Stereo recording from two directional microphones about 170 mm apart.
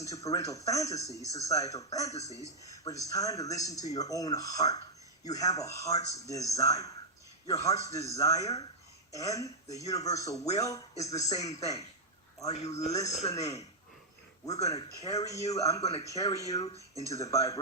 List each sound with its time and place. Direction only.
0.0 s speech: 20° left (ahead or behind)
12.5 s a man's voice: 40° left (ahead or behind)
13.3 s speech: 20° left (ahead or behind)
14.6 s speech: 20° left (ahead or behind)
15.8 s a man's voice: 35° left (ahead or behind)
16.0 s speech: 20° left (ahead or behind)